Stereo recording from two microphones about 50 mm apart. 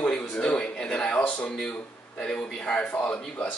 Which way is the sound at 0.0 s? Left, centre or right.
Centre.